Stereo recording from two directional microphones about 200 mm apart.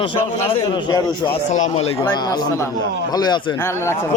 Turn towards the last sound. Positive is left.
turn(degrees=15)  # may be behind; listen again after turning